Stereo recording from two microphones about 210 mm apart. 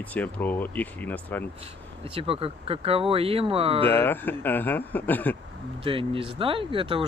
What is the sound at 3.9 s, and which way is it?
Speech, 10° left (ahead or behind).